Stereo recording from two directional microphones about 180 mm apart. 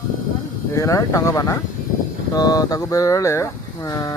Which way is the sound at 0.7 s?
15° left (ahead or behind).